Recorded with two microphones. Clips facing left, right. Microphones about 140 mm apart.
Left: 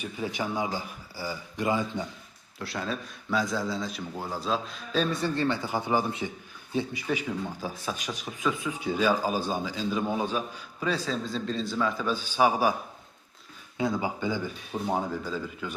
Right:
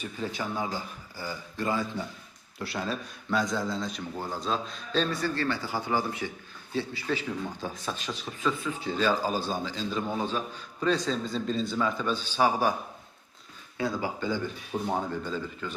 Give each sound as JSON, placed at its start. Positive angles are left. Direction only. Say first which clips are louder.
{"t": 0.0, "sound": "a man's voice", "louder": "left 2 dB", "side_deg": 15}
{"t": 2.6, "sound": "a man's voice", "louder": "even", "side_deg": 0}
{"t": 5.1, "sound": "a man's voice", "louder": "left 2 dB", "side_deg": 20}
{"t": 13.7, "sound": "a man's voice", "louder": "left 2 dB", "side_deg": 20}